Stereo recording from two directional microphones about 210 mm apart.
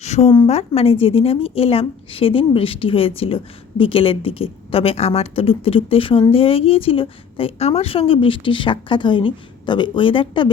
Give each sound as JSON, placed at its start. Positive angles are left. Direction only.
{"t": 0.0, "sound": "a woman's voice", "side_deg": 30}